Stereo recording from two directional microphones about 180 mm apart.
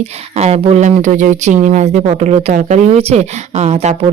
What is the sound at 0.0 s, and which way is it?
Speech, 35° right (ahead or behind).